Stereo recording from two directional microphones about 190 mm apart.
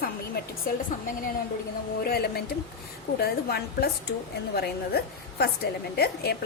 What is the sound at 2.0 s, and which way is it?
A woman's voice, 55° left (ahead or behind).